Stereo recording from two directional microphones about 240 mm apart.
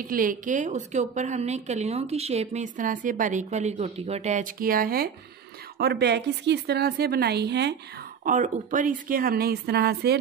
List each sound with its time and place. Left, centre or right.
0.0 s a woman's voice: right
8.2 s speech: right